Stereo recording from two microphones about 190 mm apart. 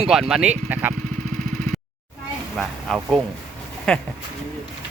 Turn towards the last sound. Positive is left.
turn(degrees=5)  # may be behind; listen again after turning